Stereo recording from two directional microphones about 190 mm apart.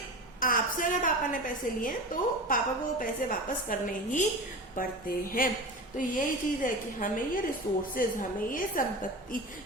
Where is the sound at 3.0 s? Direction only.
45° left (ahead or behind).